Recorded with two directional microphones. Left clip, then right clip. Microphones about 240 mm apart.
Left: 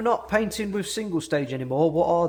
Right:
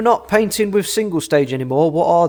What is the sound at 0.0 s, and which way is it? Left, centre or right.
A man's voice, right.